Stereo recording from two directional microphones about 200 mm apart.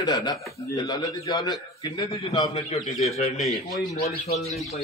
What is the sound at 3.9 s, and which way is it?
Speech, 30° left (ahead or behind).